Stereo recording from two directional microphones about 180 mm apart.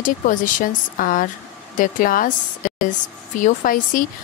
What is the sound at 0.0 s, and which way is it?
Speech, 50° left (ahead or behind).